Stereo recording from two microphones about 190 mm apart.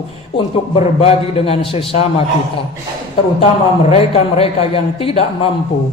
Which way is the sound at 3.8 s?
30° left (ahead or behind).